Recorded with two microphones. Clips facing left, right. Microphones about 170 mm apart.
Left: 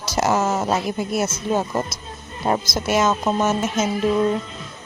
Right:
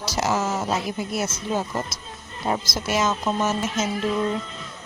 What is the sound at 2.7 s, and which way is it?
Speech, 55° left (ahead or behind).